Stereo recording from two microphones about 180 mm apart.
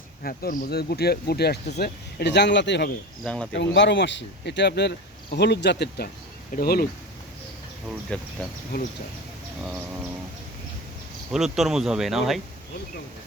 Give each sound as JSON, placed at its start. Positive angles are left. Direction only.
{"t": 0.2, "sound": "speech", "side_deg": 55}
{"t": 3.2, "sound": "speech", "side_deg": 5}
{"t": 3.5, "sound": "speech", "side_deg": 80}
{"t": 6.6, "sound": "speech", "side_deg": 55}
{"t": 8.1, "sound": "speech", "side_deg": 5}
{"t": 8.7, "sound": "speech", "side_deg": 60}
{"t": 11.3, "sound": "speech", "side_deg": 0}